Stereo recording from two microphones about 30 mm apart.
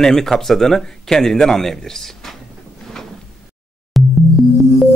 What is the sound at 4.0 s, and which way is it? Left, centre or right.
Music, centre.